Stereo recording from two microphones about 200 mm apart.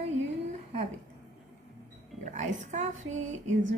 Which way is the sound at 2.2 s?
40° right (ahead or behind).